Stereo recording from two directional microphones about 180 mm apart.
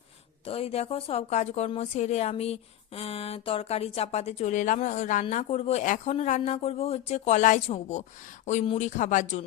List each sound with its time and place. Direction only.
0.4 s a woman's voice: 35° left (ahead or behind)